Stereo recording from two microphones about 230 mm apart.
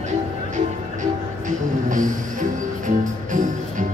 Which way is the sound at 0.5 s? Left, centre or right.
Right.